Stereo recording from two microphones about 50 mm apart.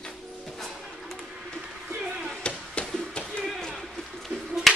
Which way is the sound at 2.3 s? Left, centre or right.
Left.